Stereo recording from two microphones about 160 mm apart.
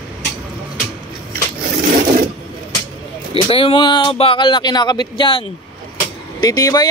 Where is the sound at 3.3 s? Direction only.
35° left (ahead or behind).